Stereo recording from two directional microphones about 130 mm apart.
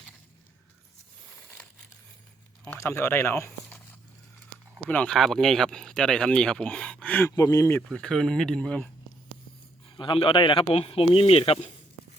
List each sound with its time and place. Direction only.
2.6 s speech: 20° left (ahead or behind)
4.9 s speech: 10° left (ahead or behind)
7.3 s speech: 25° left (ahead or behind)
7.9 s speech: 5° left (ahead or behind)
10.0 s speech: 40° left (ahead or behind)